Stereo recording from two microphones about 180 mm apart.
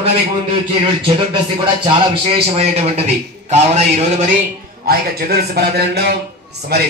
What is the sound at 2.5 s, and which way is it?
Speech, 35° right (ahead or behind).